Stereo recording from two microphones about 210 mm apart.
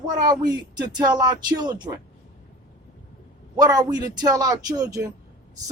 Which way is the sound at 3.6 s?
20° right (ahead or behind).